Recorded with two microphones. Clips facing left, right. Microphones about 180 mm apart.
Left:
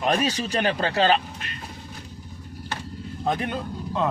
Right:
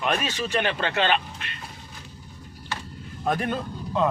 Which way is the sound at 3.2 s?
20° left (ahead or behind).